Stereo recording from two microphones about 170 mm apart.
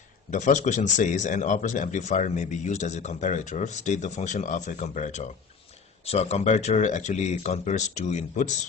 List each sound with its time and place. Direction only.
0.3 s speech: 45° left (ahead or behind)